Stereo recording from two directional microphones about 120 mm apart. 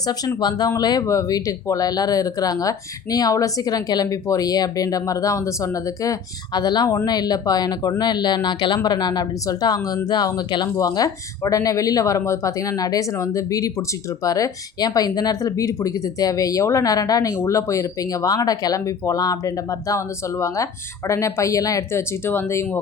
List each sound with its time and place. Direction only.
0.3 s speech: 35° left (ahead or behind)
21.1 s speech: 25° left (ahead or behind)